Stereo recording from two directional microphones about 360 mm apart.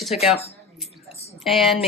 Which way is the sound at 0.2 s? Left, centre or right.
Centre.